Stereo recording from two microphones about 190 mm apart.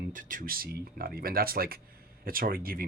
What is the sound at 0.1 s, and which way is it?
Speech, 45° right (ahead or behind).